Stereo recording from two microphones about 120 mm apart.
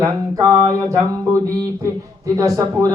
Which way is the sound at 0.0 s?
25° right (ahead or behind).